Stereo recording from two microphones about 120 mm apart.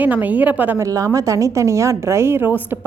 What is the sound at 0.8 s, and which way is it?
A woman's voice, 25° right (ahead or behind).